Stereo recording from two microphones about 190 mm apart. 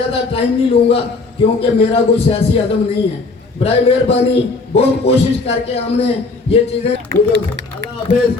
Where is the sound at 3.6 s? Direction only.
35° left (ahead or behind).